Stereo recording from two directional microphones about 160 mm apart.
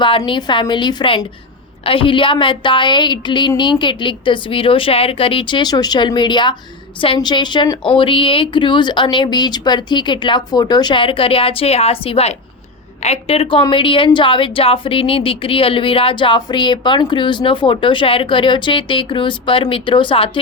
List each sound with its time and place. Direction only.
0.3 s a woman's voice: 30° left (ahead or behind)